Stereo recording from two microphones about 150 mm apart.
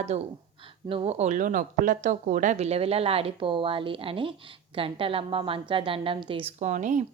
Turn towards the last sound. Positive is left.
turn(degrees=-55)  # may be behind; listen again after turning